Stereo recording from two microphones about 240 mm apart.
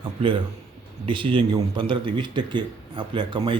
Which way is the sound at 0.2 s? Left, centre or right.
Right.